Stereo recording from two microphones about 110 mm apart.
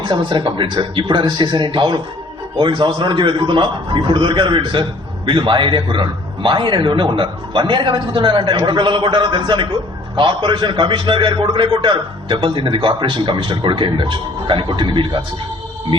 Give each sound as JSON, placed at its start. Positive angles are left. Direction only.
{"t": 0.0, "sound": "a man's voice", "side_deg": -40}